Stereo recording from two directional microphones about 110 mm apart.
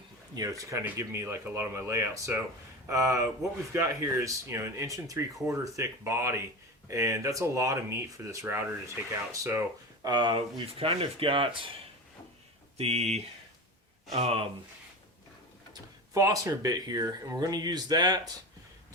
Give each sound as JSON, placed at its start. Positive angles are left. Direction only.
{"t": 0.3, "sound": "speech", "side_deg": -35}
{"t": 10.0, "sound": "speech", "side_deg": -40}
{"t": 10.8, "sound": "speech", "side_deg": -60}
{"t": 12.7, "sound": "speech", "side_deg": -75}
{"t": 15.7, "sound": "speech", "side_deg": -30}